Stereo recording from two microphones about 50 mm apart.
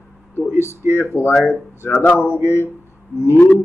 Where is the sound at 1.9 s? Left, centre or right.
Left.